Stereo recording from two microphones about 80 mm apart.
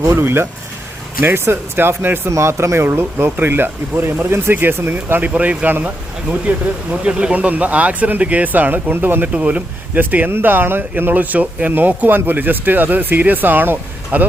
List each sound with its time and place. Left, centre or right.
0.0 s speech: right